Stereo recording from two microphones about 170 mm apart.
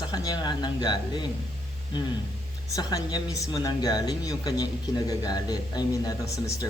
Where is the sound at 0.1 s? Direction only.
25° left (ahead or behind).